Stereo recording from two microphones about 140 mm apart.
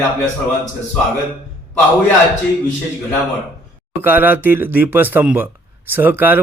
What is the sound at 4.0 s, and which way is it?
A man's voice, 15° right (ahead or behind).